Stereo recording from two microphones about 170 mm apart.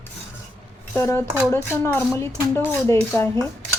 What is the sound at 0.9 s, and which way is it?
A woman's voice, 15° left (ahead or behind).